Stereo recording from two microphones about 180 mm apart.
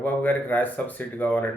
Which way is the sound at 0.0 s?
10° left (ahead or behind).